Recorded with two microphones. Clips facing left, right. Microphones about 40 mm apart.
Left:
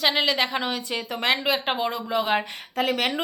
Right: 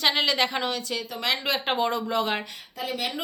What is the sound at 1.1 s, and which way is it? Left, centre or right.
Speech, left.